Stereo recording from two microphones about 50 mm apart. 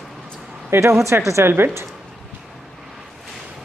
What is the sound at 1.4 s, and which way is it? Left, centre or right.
Speech, right.